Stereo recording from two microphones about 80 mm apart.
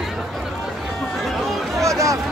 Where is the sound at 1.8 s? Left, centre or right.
Right.